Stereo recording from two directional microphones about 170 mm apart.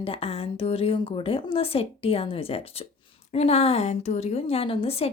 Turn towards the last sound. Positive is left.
turn(degrees=35)  # may be behind; listen again after turning